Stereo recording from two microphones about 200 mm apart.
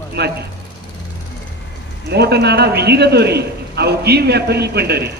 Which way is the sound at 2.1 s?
55° right (ahead or behind).